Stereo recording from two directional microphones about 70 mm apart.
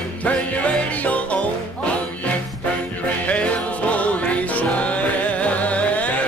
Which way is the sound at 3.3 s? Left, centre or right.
Centre.